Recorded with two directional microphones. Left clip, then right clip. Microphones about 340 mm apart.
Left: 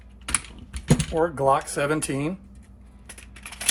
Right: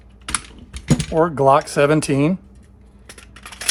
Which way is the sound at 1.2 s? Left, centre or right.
Right.